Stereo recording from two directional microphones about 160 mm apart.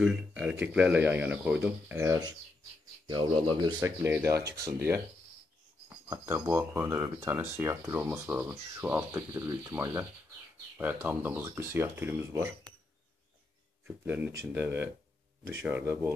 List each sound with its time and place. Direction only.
0.0 s speech: 10° right (ahead or behind); by 3.7 s 30° right (ahead or behind)
3.8 s speech: 15° right (ahead or behind)
13.8 s speech: 10° right (ahead or behind)